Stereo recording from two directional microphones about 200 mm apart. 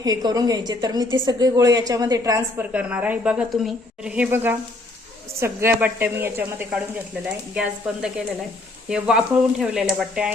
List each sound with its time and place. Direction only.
0.0 s a woman's voice: 20° right (ahead or behind); by 10.3 s 5° right (ahead or behind)